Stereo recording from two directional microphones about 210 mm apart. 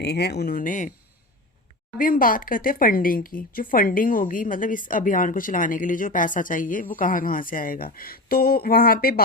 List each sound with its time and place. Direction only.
0.0 s speech: 50° left (ahead or behind)
2.0 s speech: 40° left (ahead or behind)